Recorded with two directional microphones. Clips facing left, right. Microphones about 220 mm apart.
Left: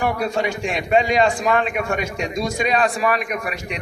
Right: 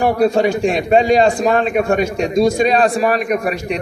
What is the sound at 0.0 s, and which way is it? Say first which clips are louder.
A man's voice: right 8 dB; 35° right (ahead or behind).